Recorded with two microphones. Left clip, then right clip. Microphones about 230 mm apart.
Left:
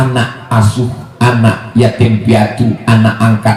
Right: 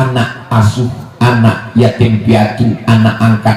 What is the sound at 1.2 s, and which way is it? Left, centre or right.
Speech, left.